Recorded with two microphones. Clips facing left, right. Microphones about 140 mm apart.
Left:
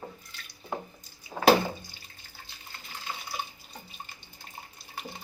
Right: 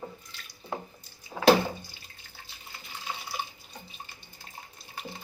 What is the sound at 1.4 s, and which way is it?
Water, centre (ahead or behind).